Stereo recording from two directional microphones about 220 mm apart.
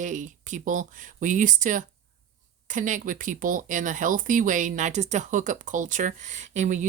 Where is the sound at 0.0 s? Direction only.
35° right (ahead or behind).